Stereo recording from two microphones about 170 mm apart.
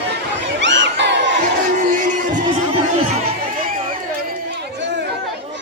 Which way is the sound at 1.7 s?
50° right (ahead or behind).